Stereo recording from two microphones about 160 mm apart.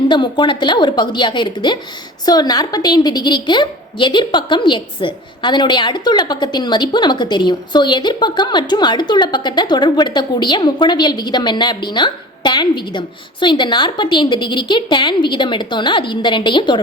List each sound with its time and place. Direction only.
0.1 s a woman's voice: 30° left (ahead or behind)